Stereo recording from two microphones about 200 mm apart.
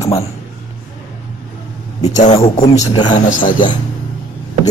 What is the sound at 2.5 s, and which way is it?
Speech, 30° left (ahead or behind).